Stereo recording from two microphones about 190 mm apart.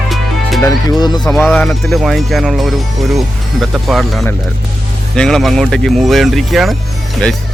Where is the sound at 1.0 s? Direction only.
20° left (ahead or behind).